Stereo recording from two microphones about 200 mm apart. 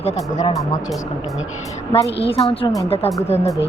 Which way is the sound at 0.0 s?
30° left (ahead or behind).